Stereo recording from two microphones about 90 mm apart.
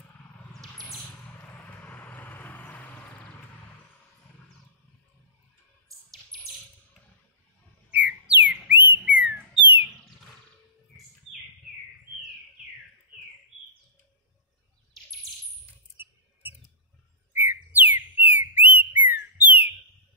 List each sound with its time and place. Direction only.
0.5 s a sound: centre (ahead or behind)
1.4 s vehicle: 20° left (ahead or behind)
8.0 s bird: 15° right (ahead or behind)
17.3 s bird: 25° right (ahead or behind)
18.7 s whistling: 20° right (ahead or behind)